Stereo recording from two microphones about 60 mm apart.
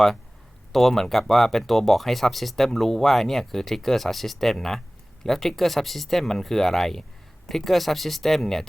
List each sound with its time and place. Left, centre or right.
0.7 s speech: centre